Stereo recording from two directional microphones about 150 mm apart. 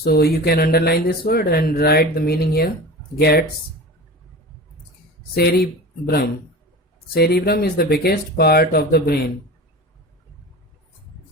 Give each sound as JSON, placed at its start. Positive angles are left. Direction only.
{"t": 0.0, "sound": "speech", "side_deg": 90}
{"t": 5.3, "sound": "speech", "side_deg": 90}